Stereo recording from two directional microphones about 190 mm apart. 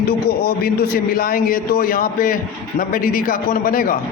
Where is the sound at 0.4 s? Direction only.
50° left (ahead or behind).